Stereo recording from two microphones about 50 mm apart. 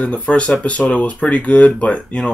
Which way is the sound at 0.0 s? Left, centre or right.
Left.